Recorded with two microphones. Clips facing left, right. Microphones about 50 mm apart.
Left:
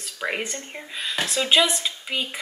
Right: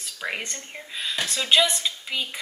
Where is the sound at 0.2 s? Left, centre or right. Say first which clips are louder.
Left 3 dB; centre.